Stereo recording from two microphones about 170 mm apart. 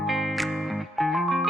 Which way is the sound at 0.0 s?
Centre (ahead or behind).